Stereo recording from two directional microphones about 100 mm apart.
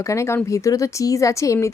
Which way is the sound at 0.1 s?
30° left (ahead or behind).